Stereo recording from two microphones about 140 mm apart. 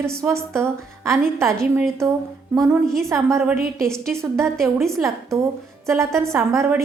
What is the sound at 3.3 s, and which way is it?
A woman's voice, 15° right (ahead or behind).